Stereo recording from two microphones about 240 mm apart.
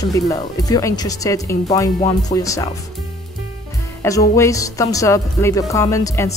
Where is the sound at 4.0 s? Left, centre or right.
Centre.